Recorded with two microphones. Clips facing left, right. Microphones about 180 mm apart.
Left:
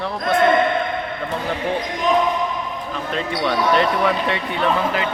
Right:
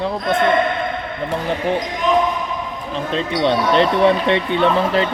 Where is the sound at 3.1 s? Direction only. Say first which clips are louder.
Right 4 dB; 25° right (ahead or behind).